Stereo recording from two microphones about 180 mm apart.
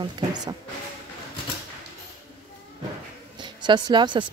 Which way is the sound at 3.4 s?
25° right (ahead or behind).